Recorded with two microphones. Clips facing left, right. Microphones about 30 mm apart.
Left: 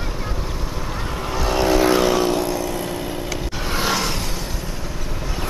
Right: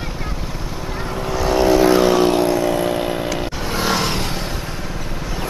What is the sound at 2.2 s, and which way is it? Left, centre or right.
Vehicle, right.